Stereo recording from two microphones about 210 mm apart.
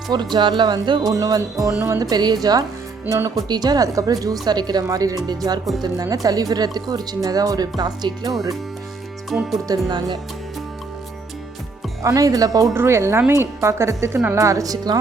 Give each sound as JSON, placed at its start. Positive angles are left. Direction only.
{"t": 0.1, "sound": "a woman's voice", "side_deg": -20}
{"t": 9.3, "sound": "speech", "side_deg": 0}
{"t": 9.6, "sound": "speech", "side_deg": -20}
{"t": 12.0, "sound": "a woman's voice", "side_deg": -15}